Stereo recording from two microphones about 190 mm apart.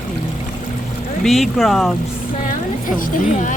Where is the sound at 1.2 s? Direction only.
Centre (ahead or behind).